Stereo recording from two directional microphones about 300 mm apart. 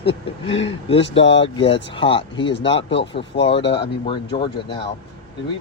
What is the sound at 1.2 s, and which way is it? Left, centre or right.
Speech, left.